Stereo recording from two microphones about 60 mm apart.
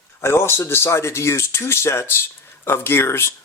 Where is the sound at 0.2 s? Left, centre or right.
Left.